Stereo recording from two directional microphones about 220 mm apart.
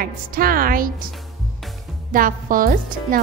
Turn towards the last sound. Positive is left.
turn(degrees=-40)  # may be behind; listen again after turning